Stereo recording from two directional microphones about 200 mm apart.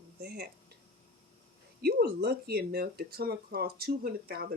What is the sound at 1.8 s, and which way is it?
Speech, 50° right (ahead or behind).